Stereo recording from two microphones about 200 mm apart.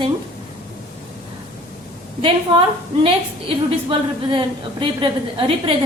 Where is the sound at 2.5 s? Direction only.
25° right (ahead or behind).